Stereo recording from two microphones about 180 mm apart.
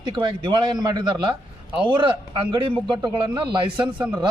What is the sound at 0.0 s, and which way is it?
A man's voice, 25° right (ahead or behind).